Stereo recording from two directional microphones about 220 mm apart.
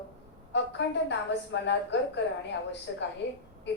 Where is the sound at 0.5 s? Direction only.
50° left (ahead or behind).